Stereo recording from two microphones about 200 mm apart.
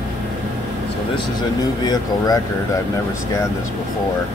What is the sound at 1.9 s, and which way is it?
Speech, 20° left (ahead or behind).